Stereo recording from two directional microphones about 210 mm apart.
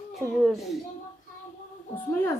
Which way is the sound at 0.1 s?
Centre (ahead or behind).